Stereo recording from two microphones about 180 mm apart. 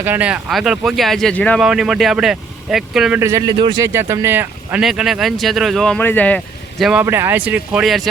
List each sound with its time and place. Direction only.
0.0 s speech: 10° right (ahead or behind)
3.2 s speech: 15° right (ahead or behind); by 7.0 s centre (ahead or behind)
7.0 s speech: 15° right (ahead or behind)